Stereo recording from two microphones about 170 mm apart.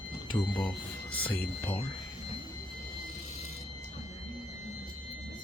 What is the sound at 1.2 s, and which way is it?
Speech, 10° left (ahead or behind).